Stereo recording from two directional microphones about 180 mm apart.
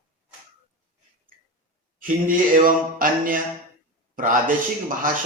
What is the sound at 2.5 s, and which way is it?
A man's voice, 50° right (ahead or behind).